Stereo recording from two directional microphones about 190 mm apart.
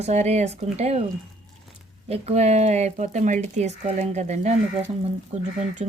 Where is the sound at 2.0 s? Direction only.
35° right (ahead or behind).